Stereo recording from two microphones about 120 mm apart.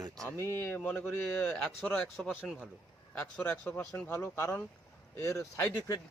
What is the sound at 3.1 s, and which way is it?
Speech, 10° left (ahead or behind).